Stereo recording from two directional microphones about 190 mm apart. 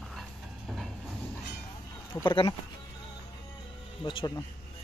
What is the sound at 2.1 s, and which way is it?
Speech, 25° left (ahead or behind).